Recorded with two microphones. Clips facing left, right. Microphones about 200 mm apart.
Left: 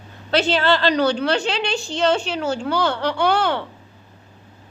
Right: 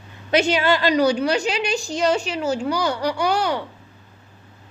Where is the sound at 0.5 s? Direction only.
15° right (ahead or behind).